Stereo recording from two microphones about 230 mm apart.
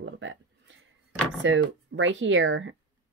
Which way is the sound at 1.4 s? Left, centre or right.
Right.